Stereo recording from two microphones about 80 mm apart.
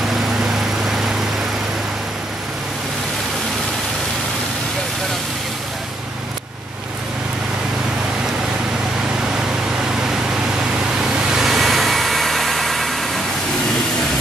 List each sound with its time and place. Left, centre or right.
0.4 s vehicle: centre
11.1 s vehicle: centre